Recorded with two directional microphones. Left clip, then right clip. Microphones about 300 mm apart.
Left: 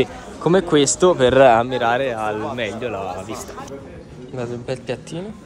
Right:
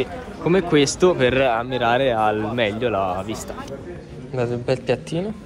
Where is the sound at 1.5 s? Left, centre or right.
Left.